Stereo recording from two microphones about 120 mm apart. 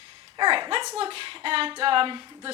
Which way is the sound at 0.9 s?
50° right (ahead or behind).